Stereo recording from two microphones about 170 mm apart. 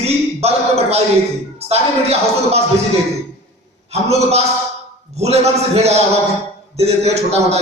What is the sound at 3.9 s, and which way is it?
A man's voice, 40° right (ahead or behind).